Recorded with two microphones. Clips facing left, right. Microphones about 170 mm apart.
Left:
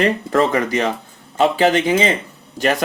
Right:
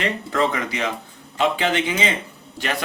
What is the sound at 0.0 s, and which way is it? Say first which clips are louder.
Speech: left 6 dB; 40° left (ahead or behind).